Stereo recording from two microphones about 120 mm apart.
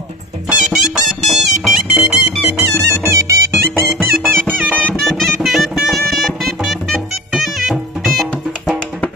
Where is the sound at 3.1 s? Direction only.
25° right (ahead or behind).